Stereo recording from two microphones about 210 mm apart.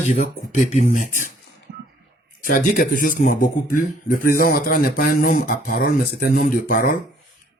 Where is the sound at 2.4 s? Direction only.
40° left (ahead or behind).